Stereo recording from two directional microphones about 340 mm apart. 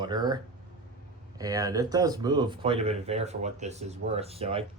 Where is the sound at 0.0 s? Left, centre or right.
Centre.